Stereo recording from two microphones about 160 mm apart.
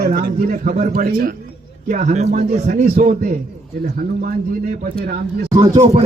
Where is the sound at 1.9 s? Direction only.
50° right (ahead or behind).